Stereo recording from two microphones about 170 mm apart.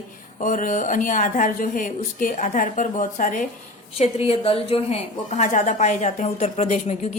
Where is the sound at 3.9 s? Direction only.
35° left (ahead or behind).